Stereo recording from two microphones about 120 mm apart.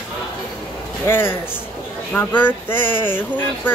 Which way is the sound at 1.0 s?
20° left (ahead or behind).